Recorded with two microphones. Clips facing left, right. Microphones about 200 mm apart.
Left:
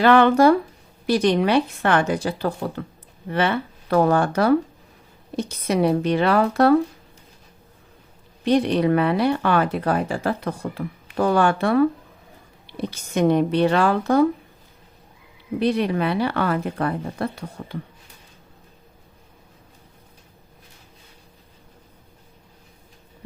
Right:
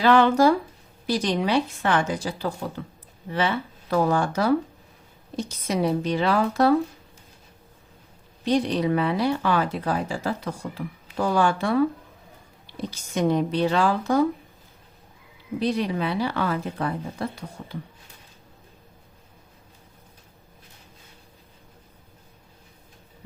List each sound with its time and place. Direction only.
0.0 s speech: 60° left (ahead or behind)
8.4 s speech: 60° left (ahead or behind)
15.5 s speech: 60° left (ahead or behind)